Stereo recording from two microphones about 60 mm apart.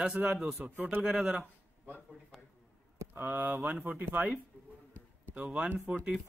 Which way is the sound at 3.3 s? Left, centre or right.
Right.